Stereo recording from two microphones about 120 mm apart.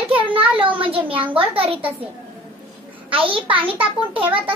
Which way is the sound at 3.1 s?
50° right (ahead or behind).